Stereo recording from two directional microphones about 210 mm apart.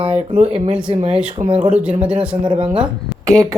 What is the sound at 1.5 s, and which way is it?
Speech, 35° right (ahead or behind).